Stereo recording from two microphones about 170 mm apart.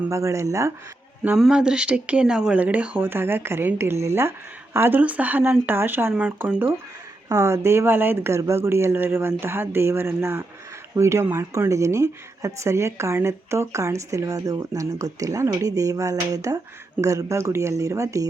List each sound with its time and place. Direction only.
0.1 s speech: 15° right (ahead or behind)
1.2 s speech: 5° right (ahead or behind)